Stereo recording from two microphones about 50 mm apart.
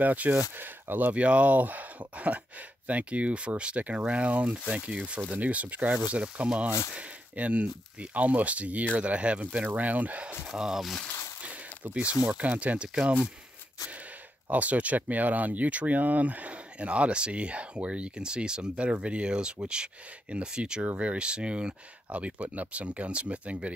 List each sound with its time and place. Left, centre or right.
0.0 s speech: right
1.1 s speech: right
10.5 s speech: centre
11.1 s a sound: left
11.4 s a sound: right
12.4 s speech: right
14.5 s speech: right